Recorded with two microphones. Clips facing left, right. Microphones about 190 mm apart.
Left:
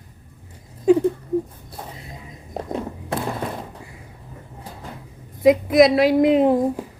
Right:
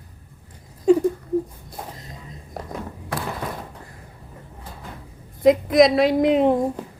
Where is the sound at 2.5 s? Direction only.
25° left (ahead or behind).